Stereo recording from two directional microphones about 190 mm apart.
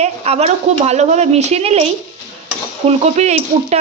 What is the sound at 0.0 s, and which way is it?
Speech, 35° right (ahead or behind).